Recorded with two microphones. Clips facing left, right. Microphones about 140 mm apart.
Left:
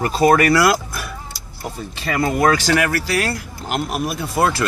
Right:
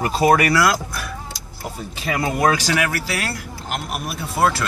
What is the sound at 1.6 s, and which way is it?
Speech, 10° right (ahead or behind).